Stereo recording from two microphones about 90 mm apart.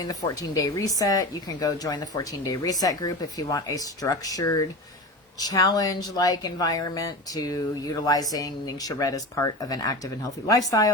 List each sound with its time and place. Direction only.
0.0 s speech: 40° left (ahead or behind)